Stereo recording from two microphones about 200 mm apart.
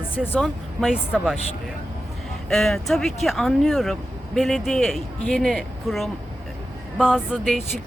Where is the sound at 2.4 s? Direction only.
Centre (ahead or behind).